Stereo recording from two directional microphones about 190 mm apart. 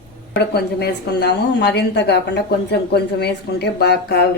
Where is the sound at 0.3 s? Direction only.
55° left (ahead or behind).